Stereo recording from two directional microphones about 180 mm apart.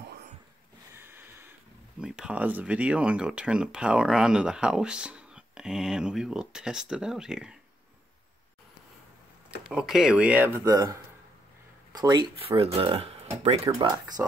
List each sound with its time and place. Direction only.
0.9 s a sound: 10° right (ahead or behind)
2.0 s speech: 5° right (ahead or behind)
9.7 s speech: 5° right (ahead or behind); by 14.2 s 25° right (ahead or behind)